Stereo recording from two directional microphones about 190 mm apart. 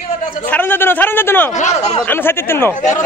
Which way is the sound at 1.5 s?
40° left (ahead or behind).